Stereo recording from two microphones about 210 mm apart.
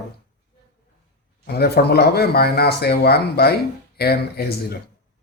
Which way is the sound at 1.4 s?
50° left (ahead or behind).